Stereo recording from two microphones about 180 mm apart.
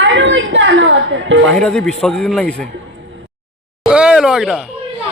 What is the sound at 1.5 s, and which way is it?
A man's voice, 5° left (ahead or behind).